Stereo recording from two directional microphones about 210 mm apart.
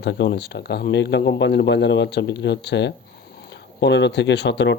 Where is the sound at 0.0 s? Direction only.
55° left (ahead or behind).